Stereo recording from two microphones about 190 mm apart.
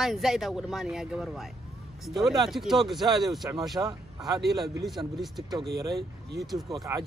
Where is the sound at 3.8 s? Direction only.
15° right (ahead or behind).